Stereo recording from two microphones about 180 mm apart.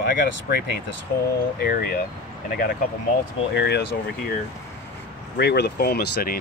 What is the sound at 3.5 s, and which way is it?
Speech, 70° left (ahead or behind).